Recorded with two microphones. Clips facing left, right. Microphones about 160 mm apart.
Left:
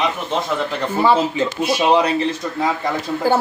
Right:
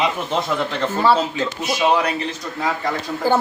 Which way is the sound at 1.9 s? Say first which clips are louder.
Left 4 dB; 30° left (ahead or behind).